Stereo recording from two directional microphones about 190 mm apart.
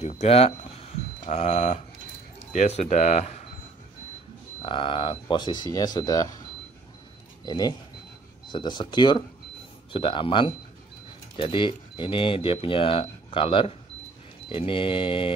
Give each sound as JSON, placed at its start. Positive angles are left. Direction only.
{"t": 0.0, "sound": "speech", "side_deg": 35}
{"t": 4.6, "sound": "speech", "side_deg": 25}
{"t": 7.4, "sound": "speech", "side_deg": 20}